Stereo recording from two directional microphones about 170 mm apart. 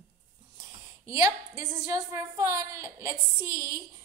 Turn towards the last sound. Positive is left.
turn(degrees=-15)  # may be behind; listen again after turning